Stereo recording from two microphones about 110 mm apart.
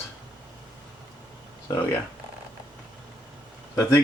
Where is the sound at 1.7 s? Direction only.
20° left (ahead or behind).